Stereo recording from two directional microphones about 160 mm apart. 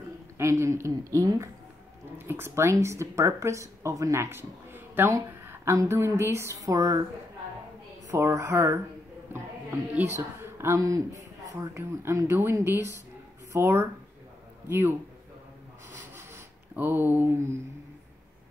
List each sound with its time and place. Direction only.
0.4 s a woman's voice: 20° right (ahead or behind)
8.1 s speech: 20° right (ahead or behind)
9.9 s speech: 15° right (ahead or behind)
16.2 s rub: 15° right (ahead or behind)